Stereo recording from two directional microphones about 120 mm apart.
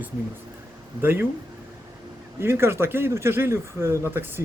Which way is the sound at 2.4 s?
20° right (ahead or behind).